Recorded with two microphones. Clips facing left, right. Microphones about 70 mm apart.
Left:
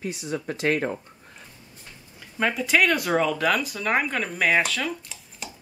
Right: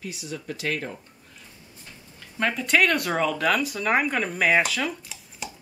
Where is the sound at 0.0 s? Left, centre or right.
Left.